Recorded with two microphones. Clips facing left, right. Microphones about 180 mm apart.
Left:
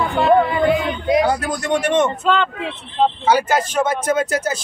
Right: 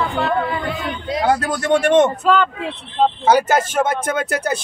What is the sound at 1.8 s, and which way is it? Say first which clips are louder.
Speech: right 4 dB; 55° right (ahead or behind).